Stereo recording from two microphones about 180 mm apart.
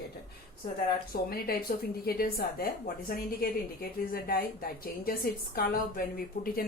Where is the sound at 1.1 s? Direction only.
55° left (ahead or behind).